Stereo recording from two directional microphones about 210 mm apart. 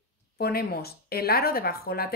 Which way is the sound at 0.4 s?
45° left (ahead or behind).